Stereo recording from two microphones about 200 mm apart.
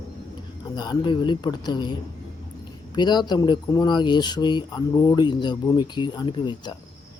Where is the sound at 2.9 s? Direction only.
20° left (ahead or behind).